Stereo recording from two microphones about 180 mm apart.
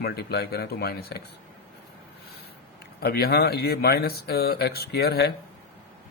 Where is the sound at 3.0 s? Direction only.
60° left (ahead or behind).